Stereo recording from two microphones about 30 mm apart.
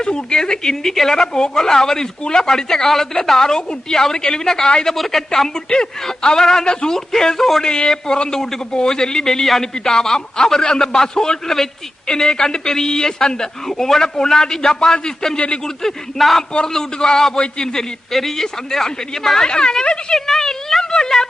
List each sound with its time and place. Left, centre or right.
0.0 s a man's voice: left; by 5.5 s centre
5.5 s a man's voice: left; by 7.6 s centre
7.6 s a man's voice: left
16.1 s a man's voice: centre
16.6 s a man's voice: centre
18.1 s a man's voice: centre
19.5 s a man's voice: left
20.1 s a sound: centre
20.8 s a sound: left